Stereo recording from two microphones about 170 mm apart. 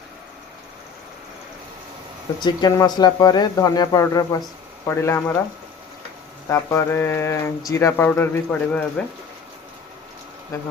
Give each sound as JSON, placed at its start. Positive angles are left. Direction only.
{"t": 2.4, "sound": "speech", "side_deg": 25}
{"t": 6.5, "sound": "speech", "side_deg": 15}